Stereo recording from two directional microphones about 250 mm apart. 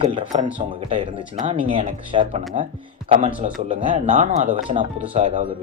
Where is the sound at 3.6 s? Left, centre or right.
Right.